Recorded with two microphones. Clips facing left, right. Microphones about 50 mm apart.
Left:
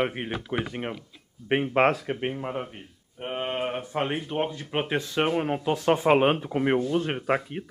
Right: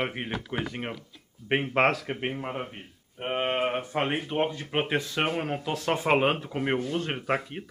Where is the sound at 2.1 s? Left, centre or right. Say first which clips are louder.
Left 2 dB; centre.